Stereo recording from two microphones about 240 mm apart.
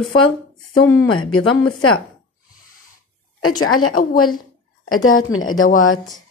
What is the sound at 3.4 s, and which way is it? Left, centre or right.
A woman's voice, left.